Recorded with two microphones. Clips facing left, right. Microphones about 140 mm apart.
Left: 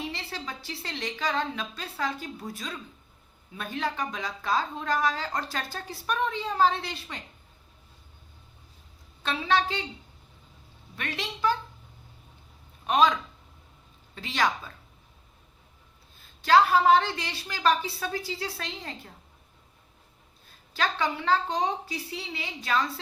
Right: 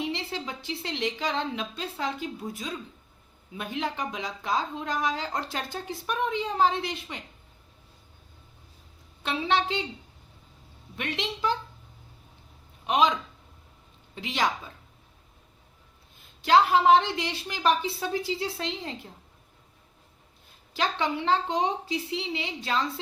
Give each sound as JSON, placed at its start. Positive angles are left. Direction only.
{"t": 0.0, "sound": "a woman's voice", "side_deg": -20}
{"t": 9.2, "sound": "a woman's voice", "side_deg": -25}
{"t": 10.9, "sound": "a woman's voice", "side_deg": -20}
{"t": 12.8, "sound": "a man's voice", "side_deg": -20}
{"t": 14.2, "sound": "a woman's voice", "side_deg": -20}
{"t": 16.4, "sound": "a woman's voice", "side_deg": -20}
{"t": 20.7, "sound": "a woman's voice", "side_deg": -20}